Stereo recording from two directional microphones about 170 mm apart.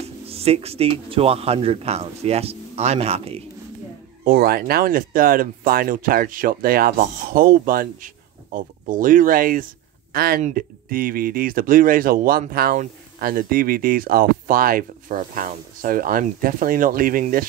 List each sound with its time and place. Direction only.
0.0 s speech: 35° right (ahead or behind)
4.2 s speech: 60° right (ahead or behind)